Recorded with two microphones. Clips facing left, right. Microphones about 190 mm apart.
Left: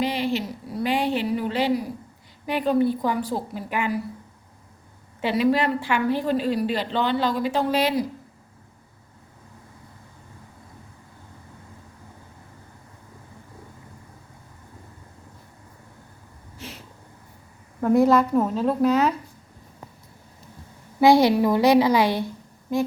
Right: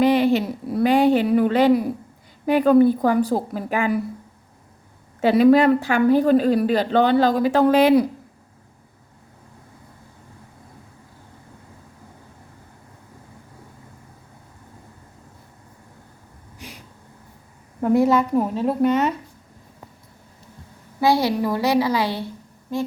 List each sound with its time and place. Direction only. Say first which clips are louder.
0.0 s a woman's voice: right 8 dB; 55° right (ahead or behind)
5.2 s a woman's voice: right 7 dB; 45° right (ahead or behind)
16.6 s a sound: left 2 dB; 15° right (ahead or behind)
18.0 s speech: even; 5° right (ahead or behind)
21.0 s a woman's voice: left 3 dB; 15° left (ahead or behind)